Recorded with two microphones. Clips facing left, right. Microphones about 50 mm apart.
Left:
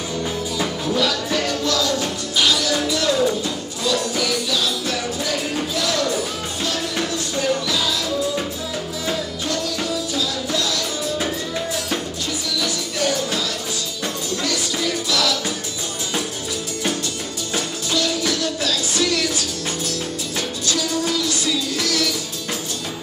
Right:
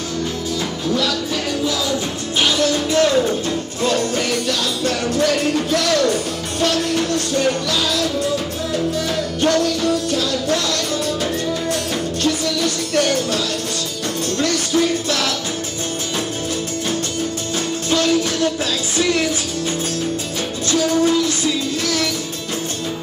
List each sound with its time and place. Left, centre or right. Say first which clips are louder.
0.6 s music: even; centre
1.6 s music: even; centre
2.3 s music: right 2 dB; right
9.1 s music: right 6 dB; right
17.8 s music: right 5 dB; right
20.6 s music: right 8 dB; right